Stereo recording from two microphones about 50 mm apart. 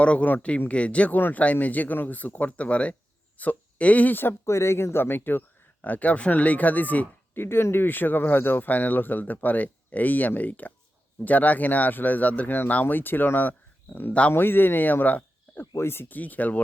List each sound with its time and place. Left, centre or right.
0.0 s speech: left
4.4 s speech: left
5.8 s speech: left
7.3 s speech: left
12.5 s speech: left
14.1 s speech: left
14.3 s speech: left
15.9 s speech: left
16.1 s speech: left